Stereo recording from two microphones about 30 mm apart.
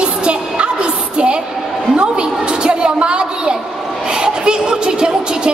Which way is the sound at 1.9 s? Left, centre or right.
Right.